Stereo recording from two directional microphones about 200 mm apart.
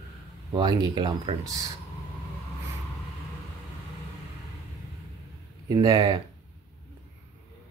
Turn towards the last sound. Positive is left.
turn(degrees=-15)  # may be behind; listen again after turning